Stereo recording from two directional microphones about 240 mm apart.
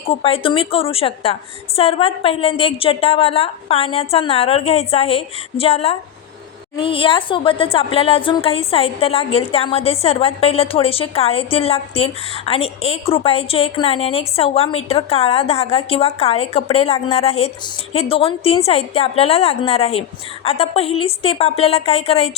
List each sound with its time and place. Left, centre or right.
0.0 s speech: left